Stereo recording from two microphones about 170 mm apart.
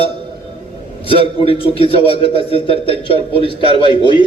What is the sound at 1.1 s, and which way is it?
A man's voice, 35° left (ahead or behind).